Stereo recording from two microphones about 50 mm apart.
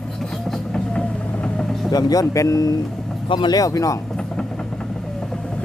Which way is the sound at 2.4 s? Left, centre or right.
Left.